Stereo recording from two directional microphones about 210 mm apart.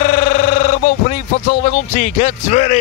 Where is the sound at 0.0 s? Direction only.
35° left (ahead or behind).